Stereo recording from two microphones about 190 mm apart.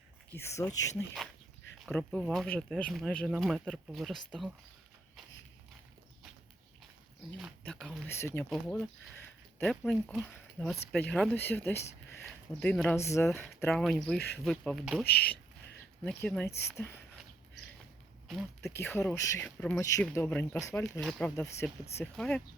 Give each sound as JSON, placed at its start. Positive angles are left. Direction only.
{"t": 0.3, "sound": "speech", "side_deg": 15}
{"t": 1.9, "sound": "speech", "side_deg": 5}
{"t": 7.3, "sound": "a sound", "side_deg": 0}
{"t": 8.0, "sound": "speech", "side_deg": 15}
{"t": 8.4, "sound": "speech", "side_deg": 5}
{"t": 16.0, "sound": "speech", "side_deg": 5}
{"t": 18.6, "sound": "speech", "side_deg": 10}
{"t": 21.0, "sound": "speech", "side_deg": 0}